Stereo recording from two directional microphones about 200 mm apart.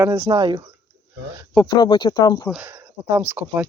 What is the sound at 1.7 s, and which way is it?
Speech, 20° left (ahead or behind).